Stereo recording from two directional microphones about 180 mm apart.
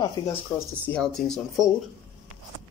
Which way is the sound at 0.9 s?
5° left (ahead or behind).